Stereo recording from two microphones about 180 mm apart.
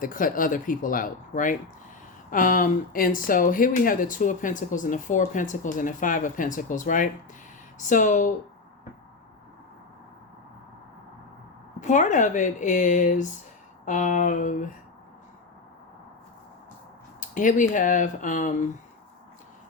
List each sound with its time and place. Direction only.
0.0 s speech: 50° left (ahead or behind)
11.8 s speech: 45° left (ahead or behind)
17.2 s speech: 45° left (ahead or behind)